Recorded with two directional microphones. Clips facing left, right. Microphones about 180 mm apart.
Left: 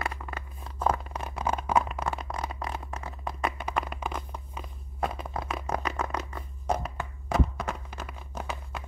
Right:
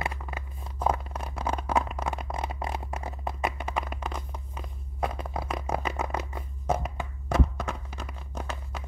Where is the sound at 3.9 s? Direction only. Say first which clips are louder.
Left 1 dB; 5° left (ahead or behind).